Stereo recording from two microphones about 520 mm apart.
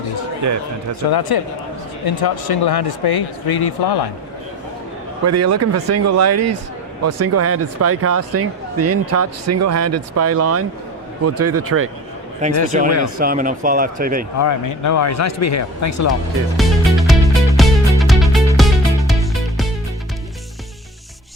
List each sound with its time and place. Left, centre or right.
0.4 s a man's voice: right
1.3 s speech: left
5.2 s speech: right
12.6 s speech: centre
14.3 s speech: left
16.6 s music: centre